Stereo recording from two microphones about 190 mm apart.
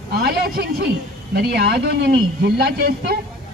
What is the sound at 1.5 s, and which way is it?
A man's voice, 55° right (ahead or behind).